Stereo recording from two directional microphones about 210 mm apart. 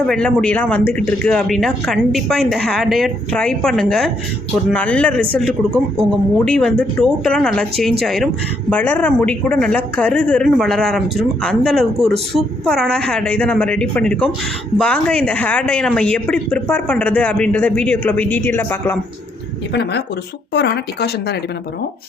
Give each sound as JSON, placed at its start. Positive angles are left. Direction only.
{"t": 0.0, "sound": "a woman's voice", "side_deg": 5}
{"t": 19.7, "sound": "speech", "side_deg": 50}